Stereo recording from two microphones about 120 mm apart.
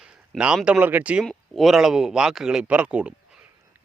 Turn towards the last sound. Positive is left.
turn(degrees=-10)  # may be behind; listen again after turning